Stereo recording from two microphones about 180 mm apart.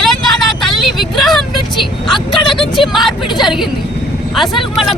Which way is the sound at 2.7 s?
Centre (ahead or behind).